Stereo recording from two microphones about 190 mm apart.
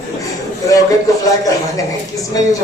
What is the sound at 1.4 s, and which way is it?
Speech, 20° left (ahead or behind).